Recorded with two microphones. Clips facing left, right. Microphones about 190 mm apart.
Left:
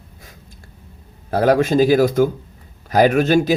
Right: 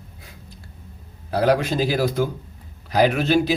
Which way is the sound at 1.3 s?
45° left (ahead or behind).